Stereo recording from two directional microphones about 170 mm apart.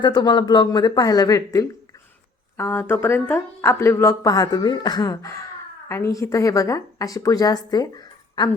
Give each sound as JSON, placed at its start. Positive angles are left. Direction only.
{"t": 0.0, "sound": "a woman's voice", "side_deg": 25}